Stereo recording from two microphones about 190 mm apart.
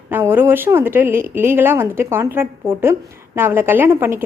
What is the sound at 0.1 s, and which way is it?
A woman's voice, 10° right (ahead or behind).